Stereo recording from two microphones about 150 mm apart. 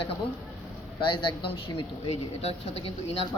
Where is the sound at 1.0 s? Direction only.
35° left (ahead or behind).